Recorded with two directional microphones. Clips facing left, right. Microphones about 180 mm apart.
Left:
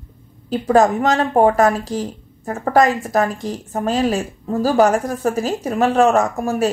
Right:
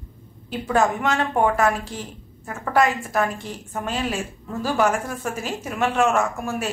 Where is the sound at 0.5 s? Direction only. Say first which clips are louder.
Left 7 dB; 40° left (ahead or behind).